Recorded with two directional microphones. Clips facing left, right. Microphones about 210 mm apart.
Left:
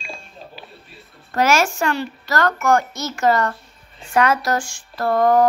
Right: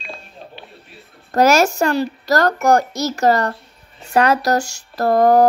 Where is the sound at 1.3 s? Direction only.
40° right (ahead or behind).